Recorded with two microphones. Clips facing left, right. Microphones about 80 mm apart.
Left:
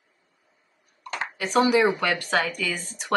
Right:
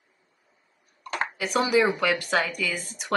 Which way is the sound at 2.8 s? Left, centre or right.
Left.